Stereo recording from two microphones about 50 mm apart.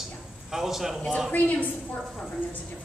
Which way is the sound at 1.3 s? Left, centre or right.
Left.